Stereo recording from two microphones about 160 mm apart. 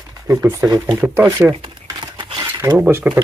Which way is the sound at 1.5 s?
30° right (ahead or behind).